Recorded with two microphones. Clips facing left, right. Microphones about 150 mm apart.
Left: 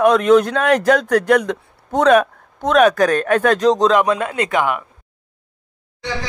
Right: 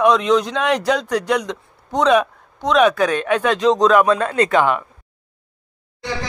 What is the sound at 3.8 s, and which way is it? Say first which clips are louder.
Speech: right 1 dB; 20° left (ahead or behind).